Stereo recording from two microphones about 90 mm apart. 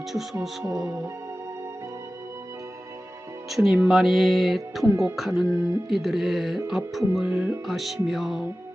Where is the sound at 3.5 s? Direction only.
5° right (ahead or behind).